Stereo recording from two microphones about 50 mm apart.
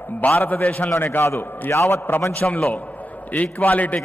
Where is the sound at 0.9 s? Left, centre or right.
Left.